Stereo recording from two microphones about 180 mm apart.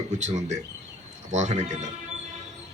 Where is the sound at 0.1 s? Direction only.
40° right (ahead or behind).